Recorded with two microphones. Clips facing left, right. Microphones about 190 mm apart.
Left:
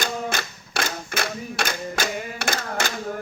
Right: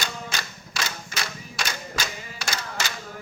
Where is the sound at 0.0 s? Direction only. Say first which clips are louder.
Left 6 dB; 50° left (ahead or behind).